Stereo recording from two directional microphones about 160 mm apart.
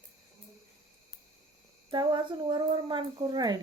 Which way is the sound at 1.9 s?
30° right (ahead or behind).